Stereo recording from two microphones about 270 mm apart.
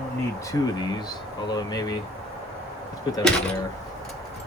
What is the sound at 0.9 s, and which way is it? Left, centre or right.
Speech, centre.